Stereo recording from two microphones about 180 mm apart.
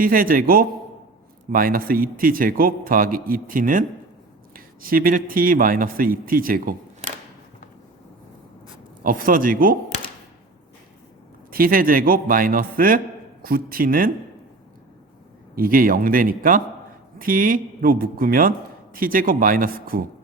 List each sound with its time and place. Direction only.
0.0 s a man's voice: 50° right (ahead or behind)
9.0 s a man's voice: 50° right (ahead or behind)
11.5 s a man's voice: 55° right (ahead or behind)
15.5 s a man's voice: 55° right (ahead or behind)